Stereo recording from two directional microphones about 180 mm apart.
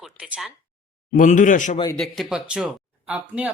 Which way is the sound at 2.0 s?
Centre (ahead or behind).